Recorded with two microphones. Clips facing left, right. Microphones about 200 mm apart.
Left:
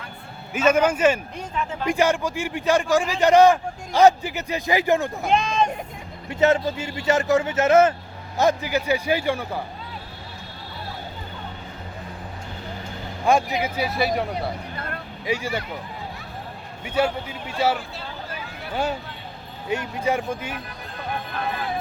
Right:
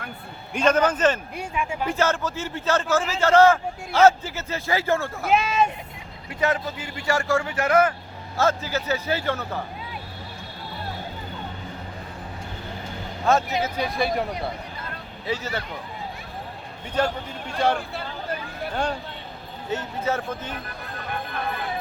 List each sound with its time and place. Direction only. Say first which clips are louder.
0.5 s a man's voice: left 1 dB; 10° left (ahead or behind)
1.4 s speech: right 1 dB; 10° right (ahead or behind)
1.9 s a man's voice: left 5 dB; 15° left (ahead or behind)
5.2 s speech: even; 5° right (ahead or behind)
6.3 s a man's voice: left 5 dB; 25° left (ahead or behind)
13.2 s a man's voice: left 1 dB; 15° left (ahead or behind)
15.3 s a man's voice: left 2 dB; 10° left (ahead or behind)
16.8 s a man's voice: left 2 dB; 10° left (ahead or behind)